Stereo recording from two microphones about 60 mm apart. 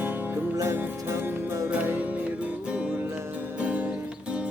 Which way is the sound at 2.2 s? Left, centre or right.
Right.